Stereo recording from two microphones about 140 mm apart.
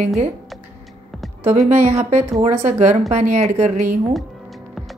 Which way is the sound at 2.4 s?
50° right (ahead or behind).